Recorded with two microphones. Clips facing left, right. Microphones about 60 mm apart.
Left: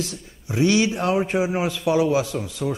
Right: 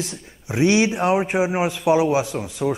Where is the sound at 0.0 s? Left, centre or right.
Right.